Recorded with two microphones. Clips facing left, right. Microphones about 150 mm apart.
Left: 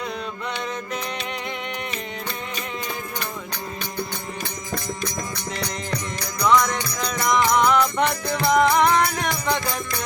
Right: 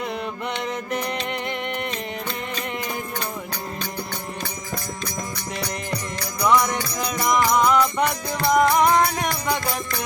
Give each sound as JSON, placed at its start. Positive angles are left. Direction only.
{"t": 5.5, "sound": "music", "side_deg": -10}
{"t": 8.9, "sound": "music", "side_deg": -25}
{"t": 9.3, "sound": "music", "side_deg": -5}